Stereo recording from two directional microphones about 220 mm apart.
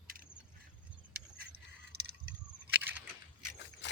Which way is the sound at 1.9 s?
45° right (ahead or behind).